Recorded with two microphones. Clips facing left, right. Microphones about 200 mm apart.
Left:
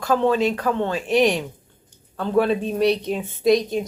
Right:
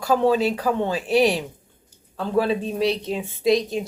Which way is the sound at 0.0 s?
10° right (ahead or behind).